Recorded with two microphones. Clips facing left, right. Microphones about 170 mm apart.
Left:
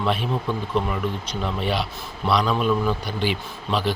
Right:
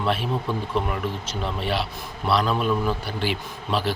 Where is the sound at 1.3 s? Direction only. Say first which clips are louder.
Left 1 dB; 5° right (ahead or behind).